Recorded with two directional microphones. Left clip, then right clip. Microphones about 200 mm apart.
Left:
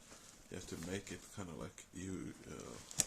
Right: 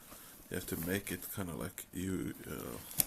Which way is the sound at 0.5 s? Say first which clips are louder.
Right 8 dB; 45° right (ahead or behind).